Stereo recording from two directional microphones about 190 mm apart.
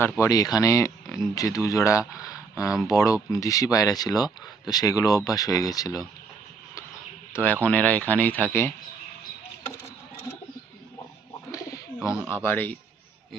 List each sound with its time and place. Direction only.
0.0 s speech: 15° left (ahead or behind)
7.6 s speech: 10° left (ahead or behind)
12.3 s speech: 10° left (ahead or behind)